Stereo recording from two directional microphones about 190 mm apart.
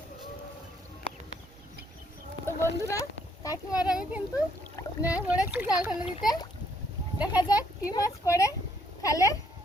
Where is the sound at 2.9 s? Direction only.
15° left (ahead or behind).